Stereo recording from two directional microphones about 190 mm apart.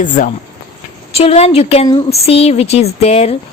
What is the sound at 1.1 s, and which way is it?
A woman's voice, 30° left (ahead or behind).